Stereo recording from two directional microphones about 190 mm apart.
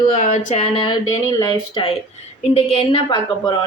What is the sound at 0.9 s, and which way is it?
A woman's voice, 20° left (ahead or behind).